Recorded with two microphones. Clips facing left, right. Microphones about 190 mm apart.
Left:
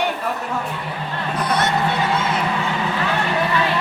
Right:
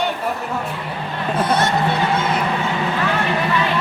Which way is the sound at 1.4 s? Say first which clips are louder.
Right 2 dB; 25° right (ahead or behind).